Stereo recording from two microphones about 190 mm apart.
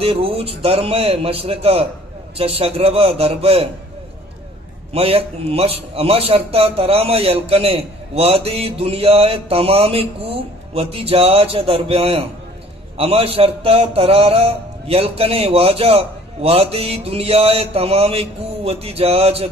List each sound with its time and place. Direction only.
0.0 s a man's voice: 30° right (ahead or behind)
4.9 s a man's voice: 30° right (ahead or behind)